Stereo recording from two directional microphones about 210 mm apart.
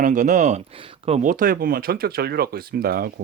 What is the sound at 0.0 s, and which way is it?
Speech, 40° right (ahead or behind).